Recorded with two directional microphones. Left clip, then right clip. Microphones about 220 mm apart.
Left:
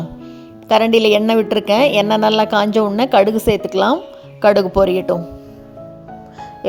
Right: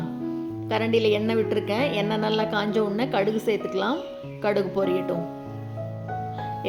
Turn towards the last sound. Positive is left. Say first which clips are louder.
# left 10 dB
turn(degrees=40)  # may be behind; listen again after turning